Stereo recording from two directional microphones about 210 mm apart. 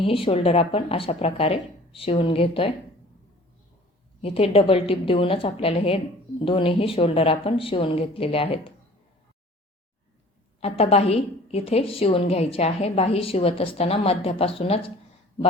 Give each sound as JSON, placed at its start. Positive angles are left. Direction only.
{"t": 0.0, "sound": "a woman's voice", "side_deg": 25}
{"t": 4.2, "sound": "a woman's voice", "side_deg": 25}
{"t": 10.6, "sound": "a woman's voice", "side_deg": 30}